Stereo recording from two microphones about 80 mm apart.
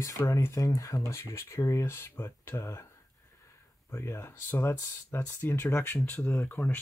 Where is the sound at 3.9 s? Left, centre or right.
Left.